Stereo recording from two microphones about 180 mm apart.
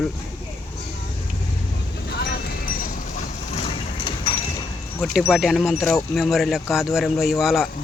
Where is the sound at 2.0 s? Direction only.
65° left (ahead or behind); by 3.7 s 40° left (ahead or behind).